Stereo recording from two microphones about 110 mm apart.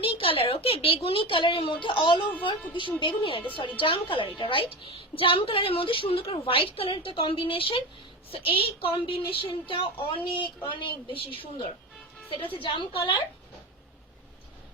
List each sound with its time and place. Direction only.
0.0 s a woman's voice: 55° left (ahead or behind)